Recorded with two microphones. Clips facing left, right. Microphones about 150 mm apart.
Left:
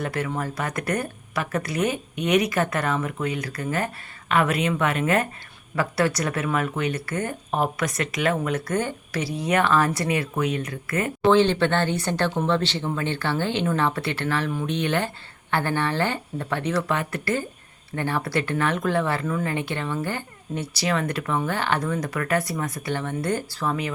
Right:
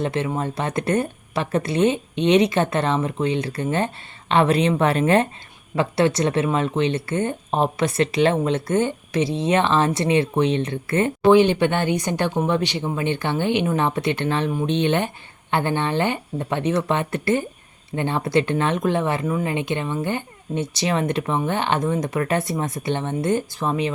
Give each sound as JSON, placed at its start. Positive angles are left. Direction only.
{"t": 0.0, "sound": "speech", "side_deg": -25}
{"t": 11.3, "sound": "speech", "side_deg": -15}